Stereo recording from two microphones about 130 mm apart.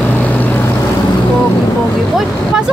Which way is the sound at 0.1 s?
10° left (ahead or behind).